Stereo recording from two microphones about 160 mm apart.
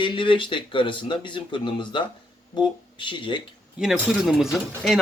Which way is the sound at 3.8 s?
Centre (ahead or behind).